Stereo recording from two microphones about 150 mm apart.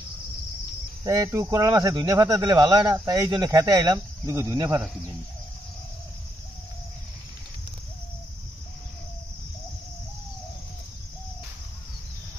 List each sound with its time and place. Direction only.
1.0 s speech: 25° right (ahead or behind)